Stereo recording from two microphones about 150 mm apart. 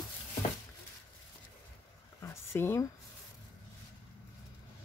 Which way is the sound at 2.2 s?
15° left (ahead or behind).